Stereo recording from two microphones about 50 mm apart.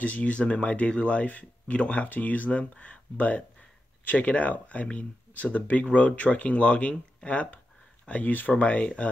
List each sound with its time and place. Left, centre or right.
0.0 s speech: left